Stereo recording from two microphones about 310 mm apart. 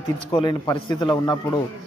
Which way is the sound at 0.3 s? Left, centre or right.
Centre.